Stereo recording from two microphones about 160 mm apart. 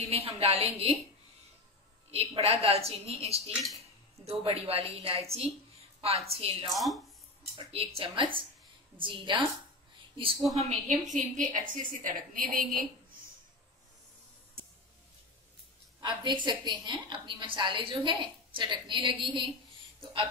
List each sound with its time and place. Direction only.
0.0 s a woman's voice: 40° right (ahead or behind)
2.0 s a woman's voice: 40° right (ahead or behind)
6.7 s speech: centre (ahead or behind)
7.5 s a woman's voice: 35° right (ahead or behind)
10.6 s a woman's voice: 50° right (ahead or behind)
16.0 s a woman's voice: 30° right (ahead or behind)